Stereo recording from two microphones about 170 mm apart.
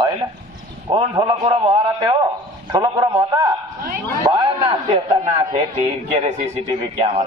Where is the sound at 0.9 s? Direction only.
25° right (ahead or behind).